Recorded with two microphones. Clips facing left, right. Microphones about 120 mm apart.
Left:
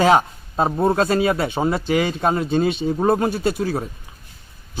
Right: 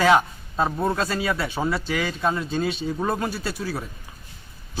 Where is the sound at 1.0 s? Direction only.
50° left (ahead or behind).